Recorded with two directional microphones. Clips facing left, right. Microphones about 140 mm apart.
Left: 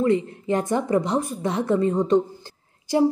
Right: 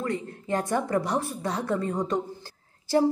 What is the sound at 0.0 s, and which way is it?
A woman's voice, 20° left (ahead or behind).